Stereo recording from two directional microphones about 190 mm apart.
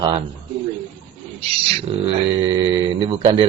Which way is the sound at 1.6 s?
30° right (ahead or behind).